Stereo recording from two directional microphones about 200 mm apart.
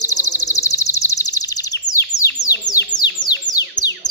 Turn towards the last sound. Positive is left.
turn(degrees=20)  # may be behind; listen again after turning